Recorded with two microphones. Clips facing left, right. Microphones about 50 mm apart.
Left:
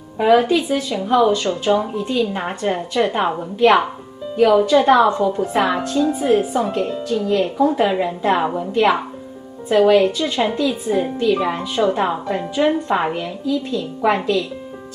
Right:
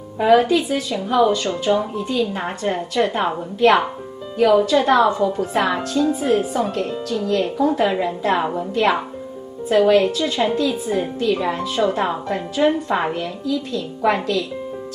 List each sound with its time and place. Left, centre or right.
0.2 s a woman's voice: centre
6.7 s a woman's voice: centre